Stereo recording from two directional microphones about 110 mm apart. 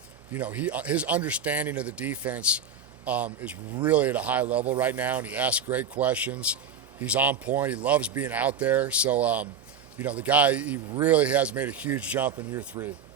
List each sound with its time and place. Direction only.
0.3 s speech: 15° right (ahead or behind)
12.7 s speech: 45° right (ahead or behind)